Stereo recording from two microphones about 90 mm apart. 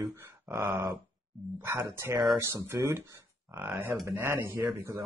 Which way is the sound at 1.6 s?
30° right (ahead or behind).